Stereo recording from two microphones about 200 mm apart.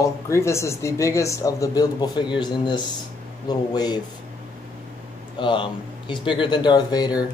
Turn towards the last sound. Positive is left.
turn(degrees=20)  # may be behind; listen again after turning